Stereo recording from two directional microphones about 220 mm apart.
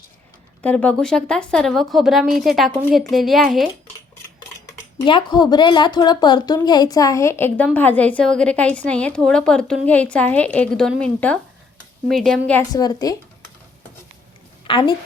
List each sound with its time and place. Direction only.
0.6 s speech: 5° left (ahead or behind)
5.0 s a woman's voice: 20° left (ahead or behind); by 12.6 s 5° left (ahead or behind)
12.7 s a woman's voice: 15° left (ahead or behind)
14.7 s speech: 20° left (ahead or behind)